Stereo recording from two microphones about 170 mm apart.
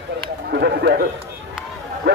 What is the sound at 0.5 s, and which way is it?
Speech, 75° right (ahead or behind).